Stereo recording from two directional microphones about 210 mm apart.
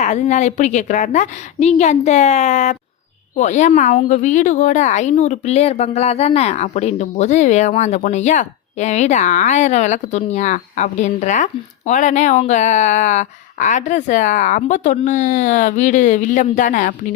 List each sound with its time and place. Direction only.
0.0 s a woman's voice: 35° left (ahead or behind)